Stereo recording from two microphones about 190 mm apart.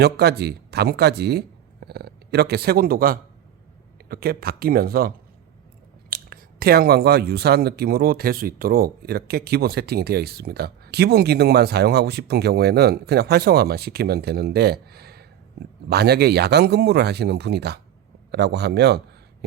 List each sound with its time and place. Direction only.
0.0 s a man's voice: 60° right (ahead or behind)